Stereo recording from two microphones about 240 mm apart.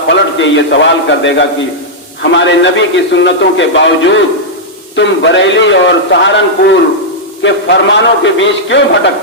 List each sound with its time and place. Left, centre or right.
0.1 s a man's voice: left